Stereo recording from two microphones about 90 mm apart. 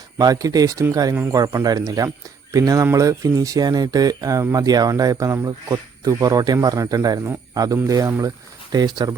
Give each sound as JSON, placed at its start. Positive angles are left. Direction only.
{"t": 0.2, "sound": "speech", "side_deg": -45}
{"t": 8.7, "sound": "speech", "side_deg": -50}